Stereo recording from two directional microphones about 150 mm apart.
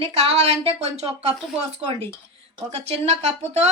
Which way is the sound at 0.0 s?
40° right (ahead or behind).